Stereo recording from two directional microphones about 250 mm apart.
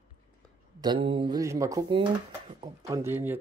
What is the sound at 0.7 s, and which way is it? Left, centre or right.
Speech, centre.